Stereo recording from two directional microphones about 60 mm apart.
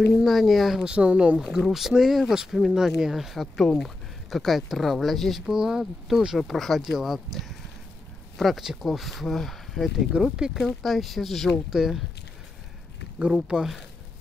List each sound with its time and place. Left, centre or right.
0.0 s speech: centre
0.8 s speech: centre
1.4 s speech: centre
10.2 s speech: centre
10.6 s speech: centre
13.2 s speech: centre